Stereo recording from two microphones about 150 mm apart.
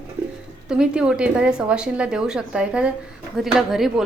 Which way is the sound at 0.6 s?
5° right (ahead or behind).